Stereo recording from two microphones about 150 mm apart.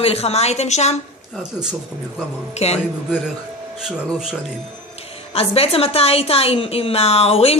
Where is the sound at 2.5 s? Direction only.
45° left (ahead or behind).